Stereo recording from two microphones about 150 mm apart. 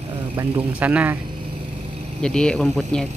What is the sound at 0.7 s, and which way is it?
Speech, 10° right (ahead or behind).